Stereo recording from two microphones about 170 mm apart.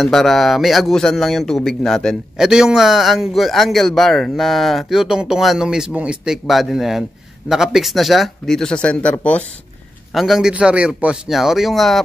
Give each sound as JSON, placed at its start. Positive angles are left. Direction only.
{"t": 0.0, "sound": "speech", "side_deg": 0}